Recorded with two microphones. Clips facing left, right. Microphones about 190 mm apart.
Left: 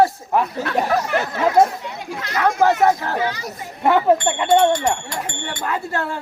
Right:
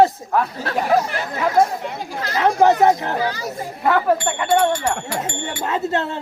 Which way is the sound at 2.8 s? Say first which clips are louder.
Right 1 dB; 20° right (ahead or behind).